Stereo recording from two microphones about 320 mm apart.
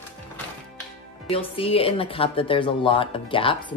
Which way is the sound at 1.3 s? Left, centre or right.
Centre.